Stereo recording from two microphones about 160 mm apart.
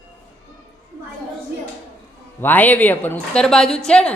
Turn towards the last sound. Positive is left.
turn(degrees=5)  # may be behind; listen again after turning